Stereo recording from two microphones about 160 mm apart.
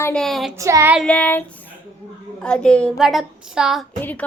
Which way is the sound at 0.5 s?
20° right (ahead or behind).